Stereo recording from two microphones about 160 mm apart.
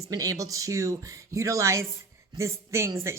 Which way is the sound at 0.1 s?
20° right (ahead or behind).